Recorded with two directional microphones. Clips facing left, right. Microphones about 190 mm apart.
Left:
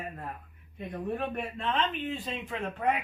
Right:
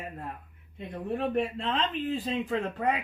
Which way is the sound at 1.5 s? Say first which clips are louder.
Right 1 dB; 30° right (ahead or behind).